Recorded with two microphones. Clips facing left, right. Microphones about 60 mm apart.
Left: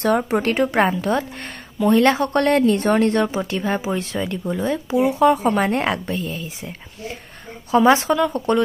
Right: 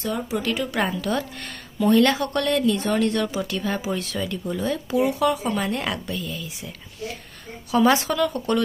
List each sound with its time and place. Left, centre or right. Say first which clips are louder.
0.2 s speech: left 6 dB; left
5.3 s speech: left 7 dB; left